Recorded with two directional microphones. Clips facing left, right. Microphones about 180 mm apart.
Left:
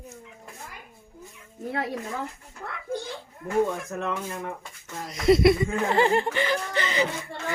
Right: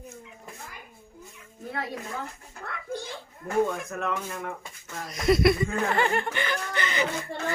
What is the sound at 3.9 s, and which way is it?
Speech, 20° left (ahead or behind).